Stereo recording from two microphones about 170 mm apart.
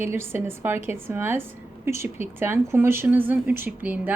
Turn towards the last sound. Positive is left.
turn(degrees=-10)  # may be behind; listen again after turning